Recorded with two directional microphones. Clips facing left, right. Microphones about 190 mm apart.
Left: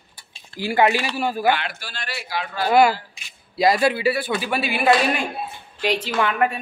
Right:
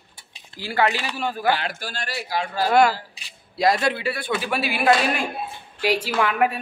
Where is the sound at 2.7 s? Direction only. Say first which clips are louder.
Left 2 dB; 5° left (ahead or behind).